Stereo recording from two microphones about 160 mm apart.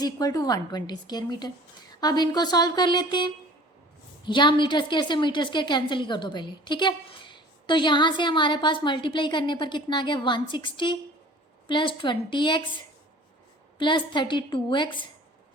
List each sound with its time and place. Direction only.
0.0 s a woman's voice: 25° left (ahead or behind)